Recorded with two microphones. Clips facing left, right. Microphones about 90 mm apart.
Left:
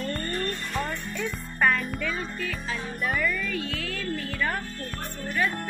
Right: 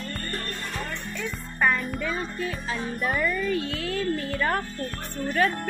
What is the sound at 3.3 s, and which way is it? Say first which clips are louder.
Speech: right 4 dB; 40° right (ahead or behind).